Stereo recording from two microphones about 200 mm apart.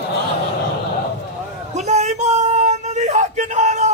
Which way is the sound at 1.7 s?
35° right (ahead or behind).